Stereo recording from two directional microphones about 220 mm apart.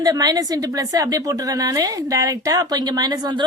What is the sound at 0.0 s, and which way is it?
A woman's voice, 15° right (ahead or behind).